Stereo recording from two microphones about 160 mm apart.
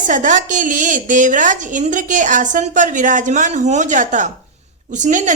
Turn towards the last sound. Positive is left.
turn(degrees=-50)  # may be behind; listen again after turning